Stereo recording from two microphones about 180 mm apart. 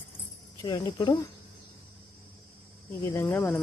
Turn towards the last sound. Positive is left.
turn(degrees=10)  # may be behind; listen again after turning